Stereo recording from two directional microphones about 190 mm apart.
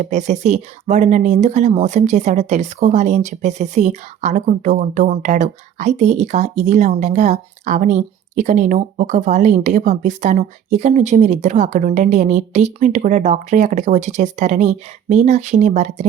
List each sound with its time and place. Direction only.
0.0 s speech: 40° right (ahead or behind)